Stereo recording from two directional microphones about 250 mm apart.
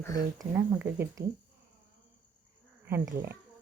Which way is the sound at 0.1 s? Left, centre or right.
Right.